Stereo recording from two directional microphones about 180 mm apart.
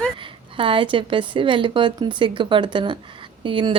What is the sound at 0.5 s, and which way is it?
Speech, 30° right (ahead or behind).